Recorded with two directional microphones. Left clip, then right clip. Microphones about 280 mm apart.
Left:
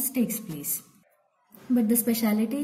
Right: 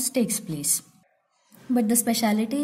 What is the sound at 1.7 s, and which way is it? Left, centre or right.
Speech, centre.